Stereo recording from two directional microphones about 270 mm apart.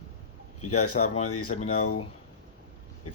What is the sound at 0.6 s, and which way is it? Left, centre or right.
Speech, left.